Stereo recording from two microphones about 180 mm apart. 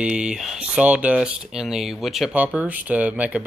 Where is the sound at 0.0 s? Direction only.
5° right (ahead or behind).